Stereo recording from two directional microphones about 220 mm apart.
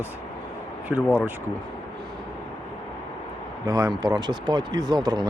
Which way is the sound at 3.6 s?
15° right (ahead or behind).